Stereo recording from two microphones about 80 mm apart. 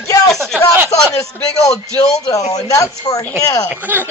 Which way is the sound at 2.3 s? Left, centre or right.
Left.